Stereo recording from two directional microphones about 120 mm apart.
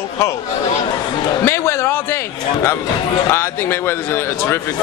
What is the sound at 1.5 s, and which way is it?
A man's voice, 25° left (ahead or behind).